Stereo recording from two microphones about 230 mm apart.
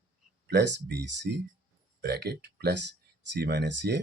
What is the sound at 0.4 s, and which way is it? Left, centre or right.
Speech, right.